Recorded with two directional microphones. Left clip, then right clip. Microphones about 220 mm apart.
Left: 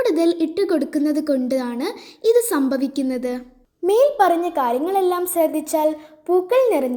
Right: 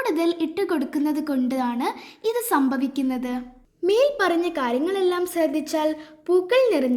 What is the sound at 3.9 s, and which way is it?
A woman's voice, 10° right (ahead or behind).